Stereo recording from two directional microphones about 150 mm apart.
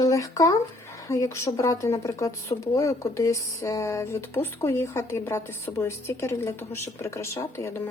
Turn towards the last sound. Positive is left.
turn(degrees=15)  # may be behind; listen again after turning